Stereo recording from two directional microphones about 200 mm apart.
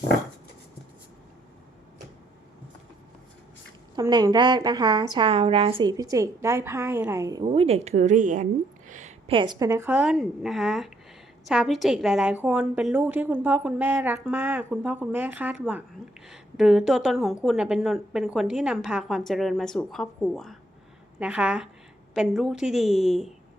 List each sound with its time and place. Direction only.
3.9 s a woman's voice: 20° right (ahead or behind)
7.4 s a woman's voice: 30° right (ahead or behind); by 23.3 s centre (ahead or behind)